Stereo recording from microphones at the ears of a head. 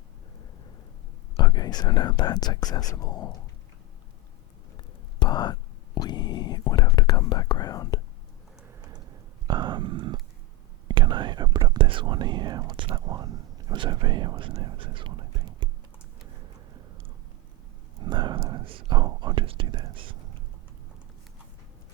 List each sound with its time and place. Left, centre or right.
1.4 s speech: left
5.2 s whispering: left
9.5 s a sound: right
10.8 s whispering: right
16.2 s a sound: right
17.9 s whispering: right